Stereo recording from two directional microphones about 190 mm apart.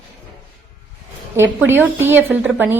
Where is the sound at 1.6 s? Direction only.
10° right (ahead or behind).